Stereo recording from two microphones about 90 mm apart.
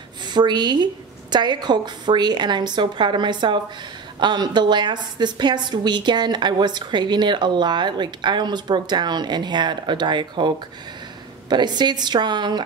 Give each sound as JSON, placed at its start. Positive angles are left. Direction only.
{"t": 0.2, "sound": "a woman's voice", "side_deg": -55}